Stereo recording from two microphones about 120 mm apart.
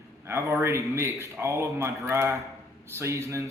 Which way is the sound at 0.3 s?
25° right (ahead or behind).